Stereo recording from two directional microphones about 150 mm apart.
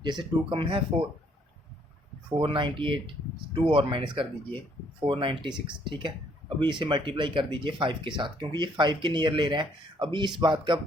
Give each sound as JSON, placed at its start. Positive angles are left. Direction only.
{"t": 0.0, "sound": "speech", "side_deg": -30}
{"t": 2.4, "sound": "speech", "side_deg": -35}